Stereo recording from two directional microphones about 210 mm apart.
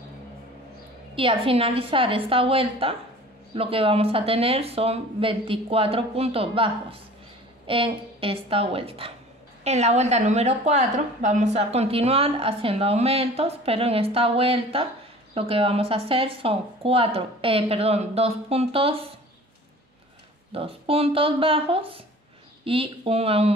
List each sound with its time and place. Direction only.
1.1 s a woman's voice: 25° right (ahead or behind)
20.5 s a woman's voice: 25° right (ahead or behind)